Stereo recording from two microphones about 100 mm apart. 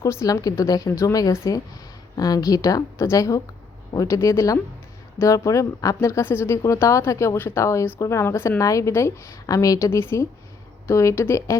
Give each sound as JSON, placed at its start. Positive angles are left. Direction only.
{"t": 0.0, "sound": "a woman's voice", "side_deg": 35}